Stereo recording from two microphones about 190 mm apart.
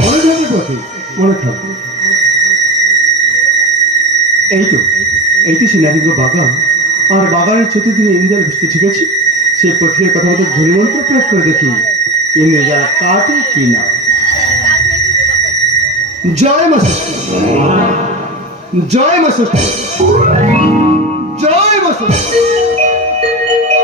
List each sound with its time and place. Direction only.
0.0 s music: 35° right (ahead or behind)
7.1 s speech: 35° right (ahead or behind)
10.7 s speech: 40° right (ahead or behind)
16.4 s speech: 35° right (ahead or behind)
18.9 s speech: 35° right (ahead or behind)